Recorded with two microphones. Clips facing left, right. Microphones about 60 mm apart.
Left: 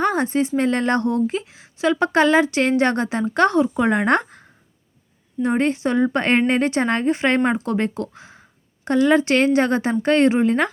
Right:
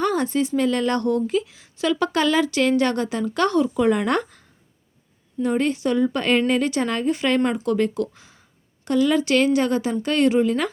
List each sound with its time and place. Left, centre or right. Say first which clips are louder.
0.0 s a woman's voice: left 2 dB; left